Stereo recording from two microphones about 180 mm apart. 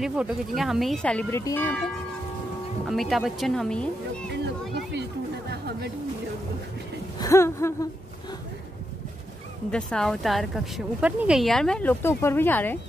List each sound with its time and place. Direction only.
0.0 s speech: centre (ahead or behind); by 1.7 s 15° left (ahead or behind)
2.9 s speech: centre (ahead or behind)
7.2 s speech: 15° left (ahead or behind)
9.7 s speech: 5° left (ahead or behind)